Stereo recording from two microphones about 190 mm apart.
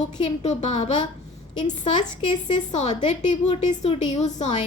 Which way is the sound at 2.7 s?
40° left (ahead or behind).